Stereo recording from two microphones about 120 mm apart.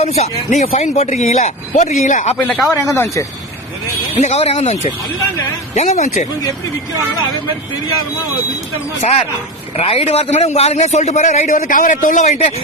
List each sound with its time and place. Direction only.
0.2 s a man's voice: 70° left (ahead or behind)
2.3 s speech: 15° left (ahead or behind)
4.2 s speech: 65° left (ahead or behind)
5.7 s a man's voice: 75° left (ahead or behind)
9.0 s a man's voice: 65° left (ahead or behind)